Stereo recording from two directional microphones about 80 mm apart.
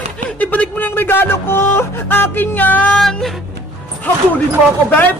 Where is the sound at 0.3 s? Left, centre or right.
Centre.